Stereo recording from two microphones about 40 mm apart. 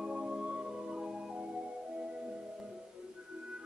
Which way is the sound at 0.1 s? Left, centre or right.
Right.